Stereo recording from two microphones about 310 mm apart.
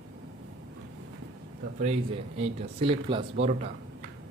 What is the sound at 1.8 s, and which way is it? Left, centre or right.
Speech, right.